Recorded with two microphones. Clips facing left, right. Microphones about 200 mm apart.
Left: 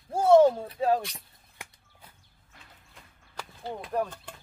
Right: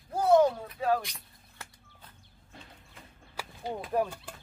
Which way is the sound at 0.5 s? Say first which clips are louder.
Left 3 dB; 30° left (ahead or behind).